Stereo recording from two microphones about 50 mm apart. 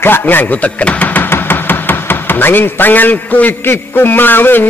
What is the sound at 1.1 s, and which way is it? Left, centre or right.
Chopping, left.